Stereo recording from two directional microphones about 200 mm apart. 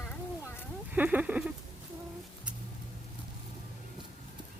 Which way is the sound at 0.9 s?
10° right (ahead or behind).